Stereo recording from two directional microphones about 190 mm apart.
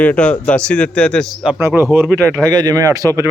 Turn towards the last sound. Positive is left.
turn(degrees=-15)  # may be behind; listen again after turning